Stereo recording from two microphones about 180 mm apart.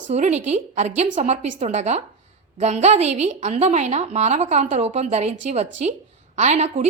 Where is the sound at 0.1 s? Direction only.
40° right (ahead or behind).